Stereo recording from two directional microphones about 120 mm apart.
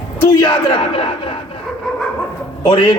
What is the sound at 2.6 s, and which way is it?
Speech, 45° left (ahead or behind).